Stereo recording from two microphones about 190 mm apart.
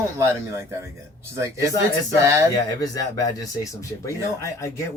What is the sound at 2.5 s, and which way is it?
Speech, 20° left (ahead or behind).